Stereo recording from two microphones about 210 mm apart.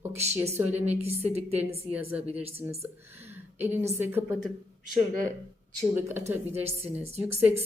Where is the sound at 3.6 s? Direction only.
10° right (ahead or behind).